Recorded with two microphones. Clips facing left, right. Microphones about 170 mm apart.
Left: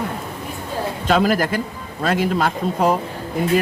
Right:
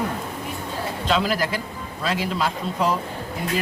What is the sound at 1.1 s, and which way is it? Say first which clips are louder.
A man's voice: left 5 dB; 50° left (ahead or behind).